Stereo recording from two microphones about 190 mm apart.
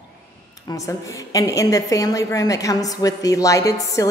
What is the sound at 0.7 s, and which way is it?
A woman's voice, 15° left (ahead or behind).